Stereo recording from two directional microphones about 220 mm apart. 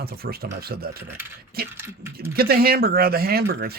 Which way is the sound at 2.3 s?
45° right (ahead or behind).